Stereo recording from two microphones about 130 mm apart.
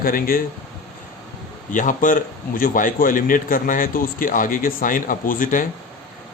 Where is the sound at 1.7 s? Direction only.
85° left.